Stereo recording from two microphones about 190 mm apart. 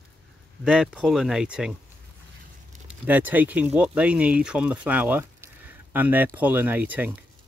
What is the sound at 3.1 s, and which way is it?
Speech, 10° right (ahead or behind).